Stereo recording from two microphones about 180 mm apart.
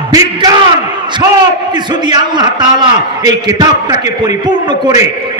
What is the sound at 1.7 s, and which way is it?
A man's voice, 25° right (ahead or behind).